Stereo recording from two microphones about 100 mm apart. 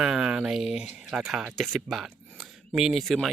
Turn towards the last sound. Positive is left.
turn(degrees=0)  # may be behind; listen again after turning